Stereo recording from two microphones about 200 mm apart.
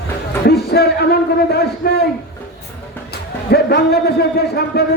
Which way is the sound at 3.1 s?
55° left (ahead or behind).